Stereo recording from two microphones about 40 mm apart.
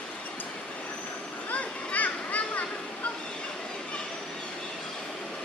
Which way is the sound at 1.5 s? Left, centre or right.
Left.